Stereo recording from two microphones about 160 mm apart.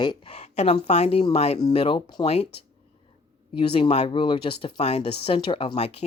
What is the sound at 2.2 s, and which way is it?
Speech, 40° left (ahead or behind).